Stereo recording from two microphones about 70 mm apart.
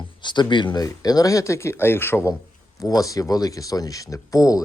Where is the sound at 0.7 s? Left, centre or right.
Left.